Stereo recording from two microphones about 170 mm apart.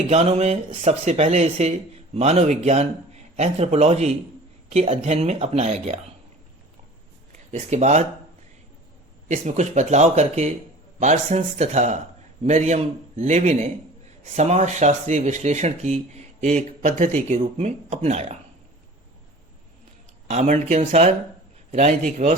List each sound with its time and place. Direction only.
0.1 s a man's voice: 35° right (ahead or behind)
7.5 s a man's voice: 40° right (ahead or behind)
9.3 s a man's voice: 45° right (ahead or behind)
20.2 s a man's voice: 40° right (ahead or behind)